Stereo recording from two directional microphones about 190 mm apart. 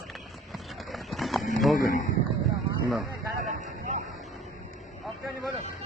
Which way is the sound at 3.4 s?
40° right (ahead or behind).